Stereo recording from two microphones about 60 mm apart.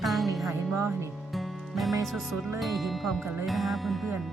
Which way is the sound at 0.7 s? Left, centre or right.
Right.